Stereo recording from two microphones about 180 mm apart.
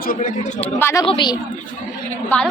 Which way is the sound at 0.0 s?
50° left (ahead or behind).